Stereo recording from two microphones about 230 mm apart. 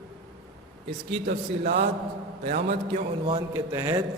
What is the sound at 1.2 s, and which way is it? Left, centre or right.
Speech, right.